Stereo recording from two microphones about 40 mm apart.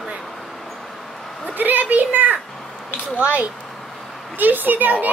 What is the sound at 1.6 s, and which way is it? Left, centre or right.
A child's voice, right.